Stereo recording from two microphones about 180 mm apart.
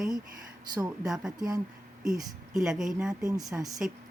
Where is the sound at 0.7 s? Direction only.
20° right (ahead or behind).